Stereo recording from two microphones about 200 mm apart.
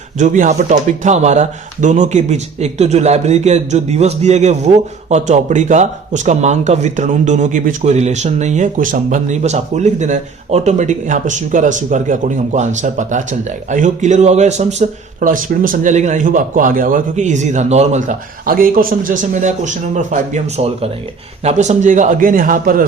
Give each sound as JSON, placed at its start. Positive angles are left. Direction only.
{"t": 0.2, "sound": "speech", "side_deg": -40}